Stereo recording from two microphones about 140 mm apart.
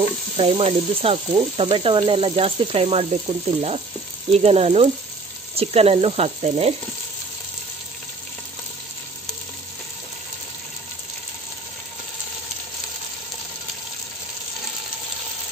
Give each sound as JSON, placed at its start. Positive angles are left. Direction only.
{"t": 0.4, "sound": "sizzle", "side_deg": -45}